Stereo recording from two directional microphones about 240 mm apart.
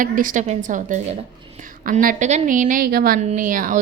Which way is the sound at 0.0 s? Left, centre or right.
Right.